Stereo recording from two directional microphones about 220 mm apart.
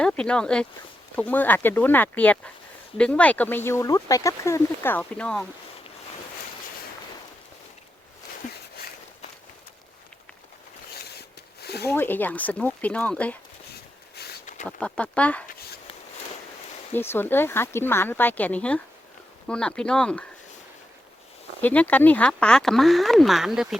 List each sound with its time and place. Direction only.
0.0 s speech: 5° left (ahead or behind)
11.1 s a sound: 45° left (ahead or behind)
11.9 s speech: 10° left (ahead or behind)
14.2 s a sound: 45° left (ahead or behind)
14.8 s speech: 5° left (ahead or behind)
16.9 s speech: 10° left (ahead or behind)
21.6 s speech: 5° left (ahead or behind)